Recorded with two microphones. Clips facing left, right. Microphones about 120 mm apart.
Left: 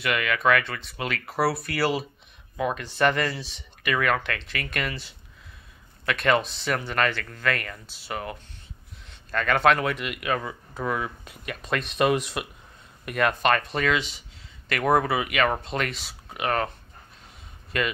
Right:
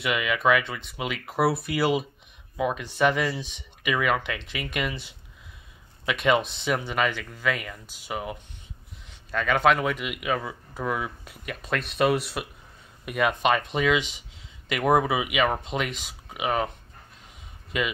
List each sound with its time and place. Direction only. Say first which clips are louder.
0.0 s speech: even; 10° right (ahead or behind)
17.7 s speech: left 1 dB; 10° right (ahead or behind)